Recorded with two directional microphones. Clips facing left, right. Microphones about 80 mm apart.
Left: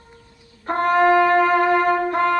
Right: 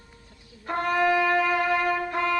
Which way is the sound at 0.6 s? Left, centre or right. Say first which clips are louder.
Left 7 dB; left.